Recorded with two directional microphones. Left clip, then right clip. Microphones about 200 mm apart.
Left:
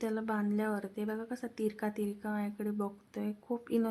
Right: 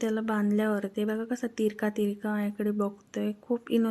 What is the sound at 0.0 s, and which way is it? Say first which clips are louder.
A woman's voice: right 6 dB; 20° right (ahead or behind).